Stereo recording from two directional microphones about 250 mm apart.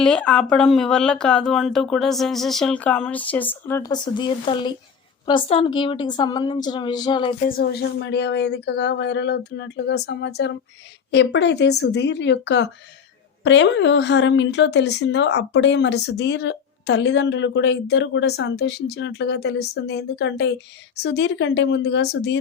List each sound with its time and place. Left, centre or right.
0.0 s a woman's voice: centre
7.4 s a woman's voice: left